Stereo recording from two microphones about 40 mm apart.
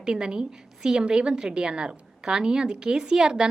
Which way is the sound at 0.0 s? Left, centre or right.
Right.